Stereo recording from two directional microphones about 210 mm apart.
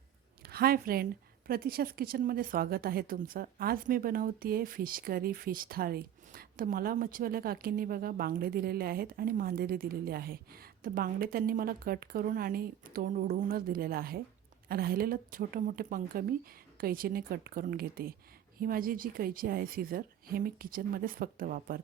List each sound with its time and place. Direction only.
0.4 s a woman's voice: 45° right (ahead or behind)